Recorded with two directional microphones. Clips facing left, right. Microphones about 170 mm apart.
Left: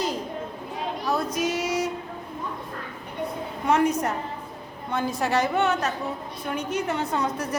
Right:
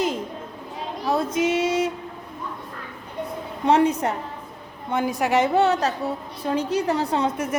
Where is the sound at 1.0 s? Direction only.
30° right (ahead or behind).